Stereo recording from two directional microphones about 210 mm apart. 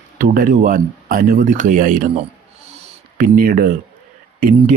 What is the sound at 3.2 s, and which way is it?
A man's voice, 40° right (ahead or behind).